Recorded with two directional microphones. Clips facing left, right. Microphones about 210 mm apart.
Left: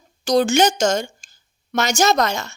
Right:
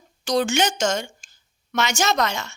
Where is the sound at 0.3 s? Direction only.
40° left (ahead or behind).